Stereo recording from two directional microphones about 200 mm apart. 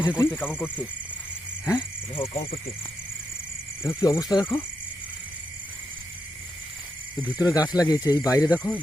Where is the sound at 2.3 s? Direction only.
30° left (ahead or behind).